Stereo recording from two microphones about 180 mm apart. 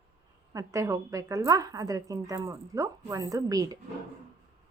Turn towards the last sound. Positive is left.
turn(degrees=-20)  # may be behind; listen again after turning